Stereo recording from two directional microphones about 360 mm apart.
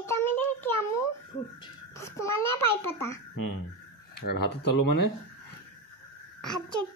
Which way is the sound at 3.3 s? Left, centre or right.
Left.